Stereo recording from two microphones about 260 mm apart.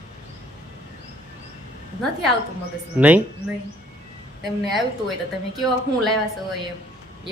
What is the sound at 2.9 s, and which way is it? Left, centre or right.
Speech, centre.